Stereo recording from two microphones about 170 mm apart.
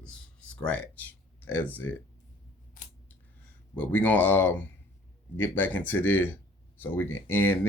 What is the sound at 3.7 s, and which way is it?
Speech, 10° left (ahead or behind).